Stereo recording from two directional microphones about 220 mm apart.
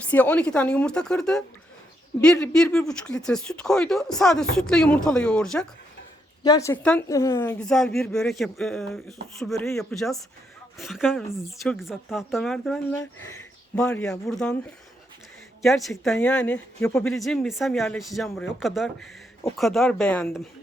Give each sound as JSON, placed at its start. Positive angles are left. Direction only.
{"t": 0.1, "sound": "speech", "side_deg": 10}
{"t": 6.4, "sound": "speech", "side_deg": 15}